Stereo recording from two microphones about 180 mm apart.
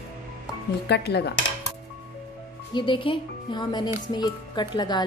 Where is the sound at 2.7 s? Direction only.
25° left (ahead or behind).